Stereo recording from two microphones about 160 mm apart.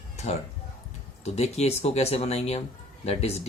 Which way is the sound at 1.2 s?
40° left (ahead or behind).